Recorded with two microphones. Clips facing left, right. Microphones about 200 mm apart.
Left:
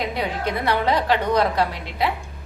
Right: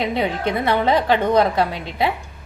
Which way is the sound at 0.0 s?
25° right (ahead or behind).